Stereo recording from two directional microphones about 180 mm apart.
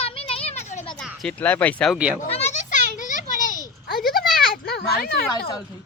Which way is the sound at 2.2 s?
35° left (ahead or behind).